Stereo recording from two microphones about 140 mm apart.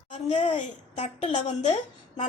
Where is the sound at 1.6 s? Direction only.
55° left (ahead or behind).